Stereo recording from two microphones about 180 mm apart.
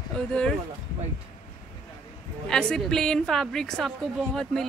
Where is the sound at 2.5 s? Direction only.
5° left (ahead or behind).